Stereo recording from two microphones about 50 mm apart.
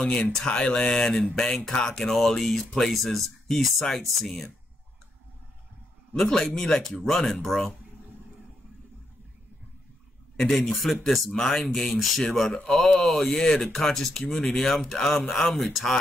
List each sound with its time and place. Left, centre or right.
0.5 s a sound: centre
1.0 s speech: centre
6.1 s speech: centre
10.3 s speech: centre